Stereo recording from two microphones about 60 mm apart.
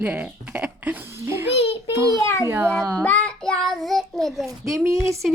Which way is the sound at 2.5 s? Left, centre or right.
Right.